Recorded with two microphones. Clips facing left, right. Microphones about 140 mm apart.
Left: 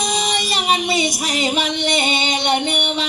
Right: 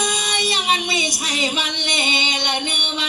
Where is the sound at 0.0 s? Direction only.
45° left (ahead or behind).